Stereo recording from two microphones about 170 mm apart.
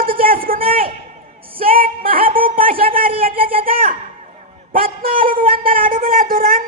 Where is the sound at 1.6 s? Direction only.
35° right (ahead or behind).